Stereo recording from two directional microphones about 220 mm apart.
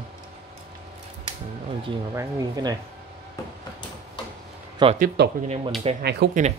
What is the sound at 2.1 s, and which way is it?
Speech, 15° right (ahead or behind).